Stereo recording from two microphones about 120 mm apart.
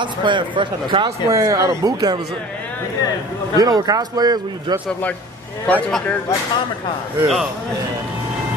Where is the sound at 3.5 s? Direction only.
35° right (ahead or behind).